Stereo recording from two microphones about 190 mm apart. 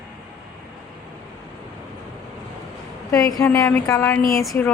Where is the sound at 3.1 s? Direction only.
20° left (ahead or behind).